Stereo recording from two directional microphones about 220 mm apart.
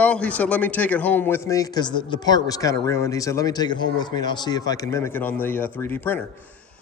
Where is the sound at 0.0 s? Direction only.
5° left (ahead or behind).